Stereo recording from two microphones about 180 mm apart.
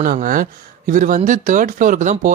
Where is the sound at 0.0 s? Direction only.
50° right (ahead or behind).